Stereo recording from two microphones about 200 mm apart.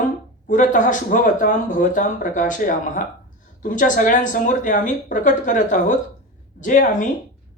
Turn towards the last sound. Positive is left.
turn(degrees=40)  # may be behind; listen again after turning